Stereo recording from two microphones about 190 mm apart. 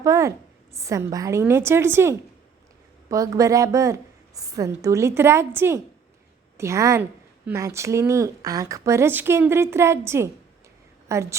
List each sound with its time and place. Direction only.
0.0 s speech: 15° right (ahead or behind)